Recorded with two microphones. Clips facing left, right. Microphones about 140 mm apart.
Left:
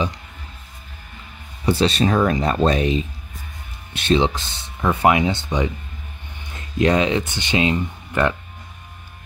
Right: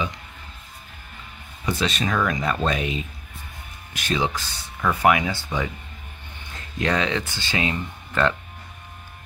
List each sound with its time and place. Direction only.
1.7 s speech: 30° left (ahead or behind)
6.8 s speech: 20° left (ahead or behind)